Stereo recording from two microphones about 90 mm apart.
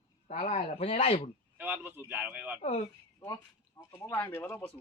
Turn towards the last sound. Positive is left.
turn(degrees=25)  # may be behind; listen again after turning